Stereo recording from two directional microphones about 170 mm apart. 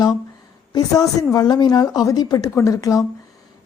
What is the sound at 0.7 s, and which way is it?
A woman's voice, 20° left (ahead or behind).